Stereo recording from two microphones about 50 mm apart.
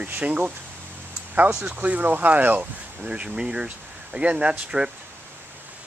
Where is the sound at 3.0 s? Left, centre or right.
Right.